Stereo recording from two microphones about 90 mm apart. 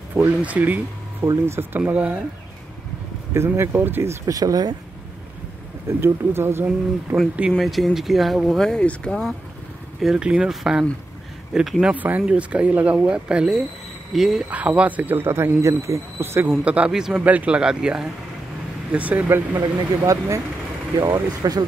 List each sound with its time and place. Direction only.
0.1 s speech: 20° right (ahead or behind)
1.8 s speech: 15° right (ahead or behind)
3.3 s speech: 30° right (ahead or behind)
4.4 s speech: 45° right (ahead or behind)
5.9 s speech: 25° right (ahead or behind)
7.5 s speech: centre (ahead or behind)
9.9 s speech: 5° right (ahead or behind)
11.8 s speech: 15° right (ahead or behind)
14.5 s speech: 15° right (ahead or behind)
16.6 s speech: 15° right (ahead or behind)
20.1 s speech: 35° right (ahead or behind)
21.0 s speech: 45° right (ahead or behind)